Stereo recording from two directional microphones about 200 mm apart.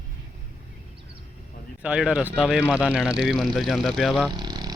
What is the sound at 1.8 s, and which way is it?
Speech, 5° right (ahead or behind).